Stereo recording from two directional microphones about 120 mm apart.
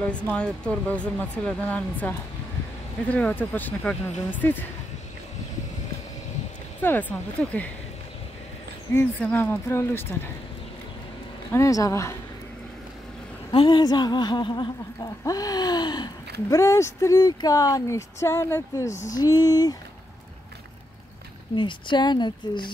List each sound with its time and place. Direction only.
0.0 s speech: 10° left (ahead or behind)
6.8 s speech: 15° left (ahead or behind)
8.9 s speech: 20° left (ahead or behind)
11.5 s speech: 25° left (ahead or behind)
13.5 s a woman's voice: 45° left (ahead or behind)
21.5 s a woman's voice: 45° left (ahead or behind)